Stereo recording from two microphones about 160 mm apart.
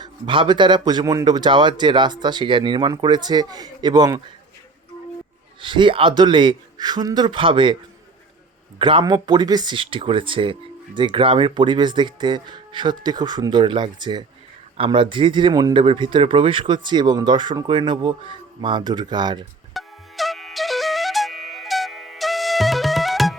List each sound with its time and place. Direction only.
0.0 s speech: 30° right (ahead or behind)
5.6 s speech: 30° right (ahead or behind)
8.8 s speech: 30° right (ahead or behind)
19.7 s music: centre (ahead or behind)